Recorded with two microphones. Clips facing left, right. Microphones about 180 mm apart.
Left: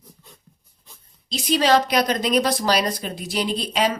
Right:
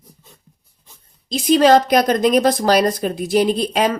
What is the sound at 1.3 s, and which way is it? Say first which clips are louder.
A woman's voice: right 6 dB; 50° right (ahead or behind).